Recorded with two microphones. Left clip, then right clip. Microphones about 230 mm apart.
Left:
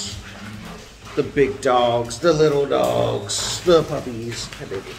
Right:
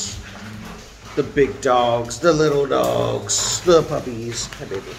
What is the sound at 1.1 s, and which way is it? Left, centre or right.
Speech, centre.